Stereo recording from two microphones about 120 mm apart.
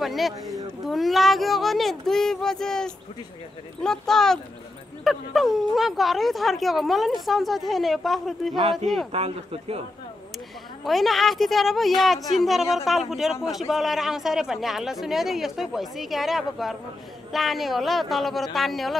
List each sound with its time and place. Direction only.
0.0 s speech: centre (ahead or behind)
9.1 s speech: 55° right (ahead or behind)
10.8 s speech: centre (ahead or behind)